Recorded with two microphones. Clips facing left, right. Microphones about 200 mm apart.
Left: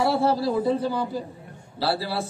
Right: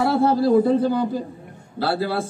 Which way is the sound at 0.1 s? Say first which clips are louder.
Right 6 dB; 50° right (ahead or behind).